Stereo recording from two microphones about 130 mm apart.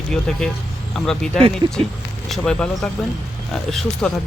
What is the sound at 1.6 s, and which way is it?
Speech, 35° right (ahead or behind).